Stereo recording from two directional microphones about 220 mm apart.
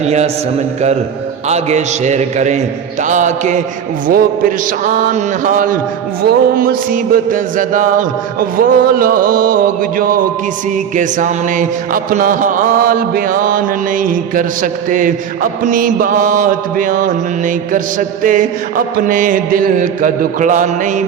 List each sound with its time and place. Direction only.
0.0 s a man's voice: 30° right (ahead or behind)
1.5 s mantra: 30° right (ahead or behind)